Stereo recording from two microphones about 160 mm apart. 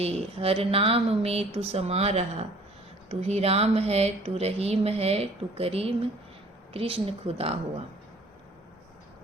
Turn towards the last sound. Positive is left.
turn(degrees=-35)  # may be behind; listen again after turning